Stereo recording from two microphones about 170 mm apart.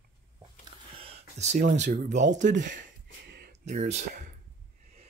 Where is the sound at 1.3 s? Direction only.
40° right (ahead or behind).